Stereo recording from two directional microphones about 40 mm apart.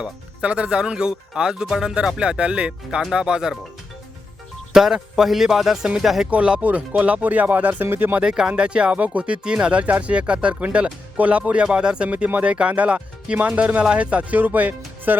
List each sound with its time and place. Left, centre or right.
0.4 s speech: right
4.7 s speech: centre
6.3 s speech: right
6.6 s speech: right
7.9 s speech: right
8.2 s speech: centre
9.8 s speech: right
11.6 s speech: right
12.0 s speech: right
14.3 s speech: right